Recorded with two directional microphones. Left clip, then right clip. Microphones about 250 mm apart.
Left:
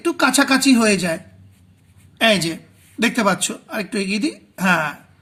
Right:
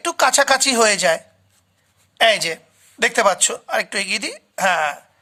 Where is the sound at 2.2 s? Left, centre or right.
Right.